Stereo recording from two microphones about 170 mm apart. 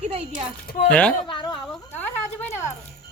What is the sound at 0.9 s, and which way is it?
Speech, 5° left (ahead or behind).